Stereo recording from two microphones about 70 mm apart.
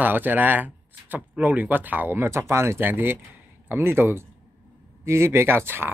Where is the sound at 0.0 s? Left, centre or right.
Right.